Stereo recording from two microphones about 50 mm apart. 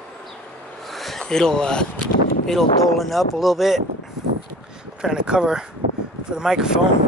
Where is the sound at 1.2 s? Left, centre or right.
Centre.